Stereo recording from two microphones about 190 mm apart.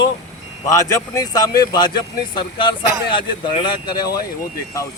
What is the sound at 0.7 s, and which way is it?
Speech, 15° left (ahead or behind).